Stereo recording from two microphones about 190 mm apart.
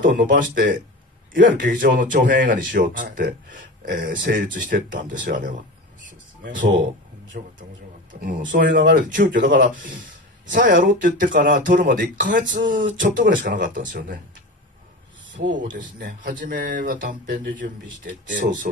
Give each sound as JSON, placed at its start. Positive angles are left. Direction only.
{"t": 0.0, "sound": "speech", "side_deg": -50}
{"t": 9.8, "sound": "a sound", "side_deg": -45}
{"t": 11.0, "sound": "speech", "side_deg": -45}
{"t": 16.0, "sound": "speech", "side_deg": -45}